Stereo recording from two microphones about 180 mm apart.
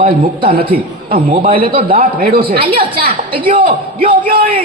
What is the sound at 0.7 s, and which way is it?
A woman's voice, 50° right (ahead or behind).